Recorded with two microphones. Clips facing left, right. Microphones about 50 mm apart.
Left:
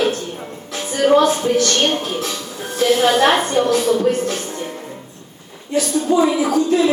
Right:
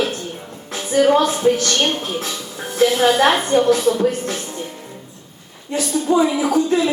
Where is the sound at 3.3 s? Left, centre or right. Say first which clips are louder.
Left 2 dB; left.